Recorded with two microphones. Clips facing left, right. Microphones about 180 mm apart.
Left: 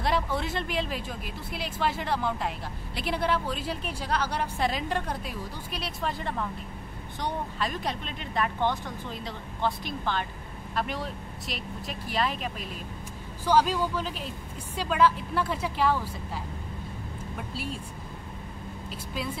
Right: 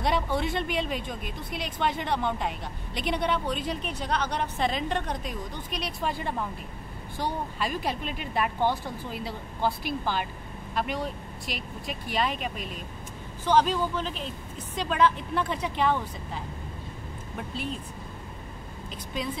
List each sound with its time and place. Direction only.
0.0 s a woman's voice: centre (ahead or behind)
17.4 s a woman's voice: 5° left (ahead or behind)